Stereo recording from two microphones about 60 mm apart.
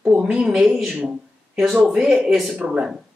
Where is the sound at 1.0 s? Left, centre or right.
Centre.